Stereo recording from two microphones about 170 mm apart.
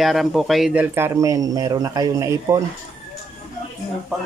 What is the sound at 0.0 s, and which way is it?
Speech, centre (ahead or behind).